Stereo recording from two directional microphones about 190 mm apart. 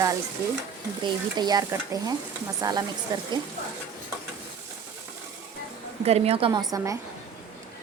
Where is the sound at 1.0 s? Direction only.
20° right (ahead or behind).